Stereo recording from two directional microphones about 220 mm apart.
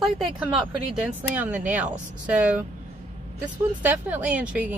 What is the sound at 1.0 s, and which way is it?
Speech, 5° right (ahead or behind).